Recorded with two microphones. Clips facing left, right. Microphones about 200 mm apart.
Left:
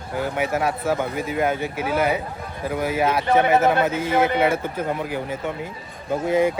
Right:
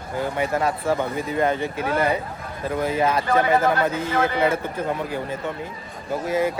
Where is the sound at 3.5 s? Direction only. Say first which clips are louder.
Left 2 dB; 25° left (ahead or behind).